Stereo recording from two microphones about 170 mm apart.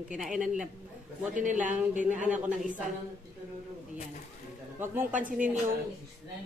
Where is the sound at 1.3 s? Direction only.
50° right (ahead or behind).